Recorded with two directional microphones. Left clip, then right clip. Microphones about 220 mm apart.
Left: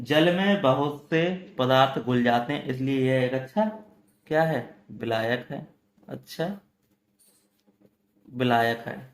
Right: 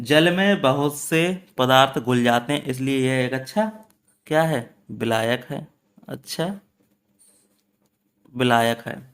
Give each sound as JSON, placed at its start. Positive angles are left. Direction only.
{"t": 0.0, "sound": "speech", "side_deg": -35}
{"t": 8.4, "sound": "speech", "side_deg": -35}